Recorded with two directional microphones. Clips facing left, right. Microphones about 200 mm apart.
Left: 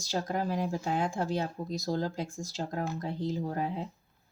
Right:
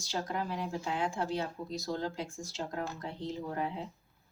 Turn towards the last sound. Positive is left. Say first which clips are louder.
# left 3 dB
turn(degrees=40)  # may be behind; listen again after turning